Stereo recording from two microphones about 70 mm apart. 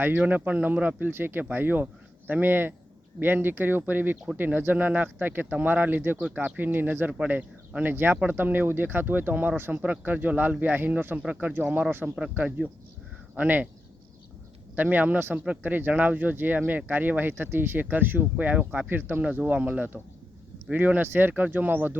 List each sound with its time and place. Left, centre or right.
0.2 s speech: right
6.2 s speech: centre
12.5 s speech: centre
14.8 s speech: right
19.2 s speech: centre